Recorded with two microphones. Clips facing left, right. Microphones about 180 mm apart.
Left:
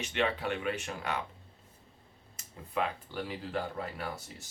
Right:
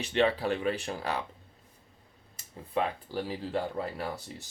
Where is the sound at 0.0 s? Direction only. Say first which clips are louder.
Right 5 dB; 35° right (ahead or behind).